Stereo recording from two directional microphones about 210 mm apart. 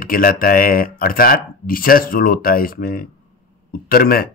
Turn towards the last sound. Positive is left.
turn(degrees=45)  # may be behind; listen again after turning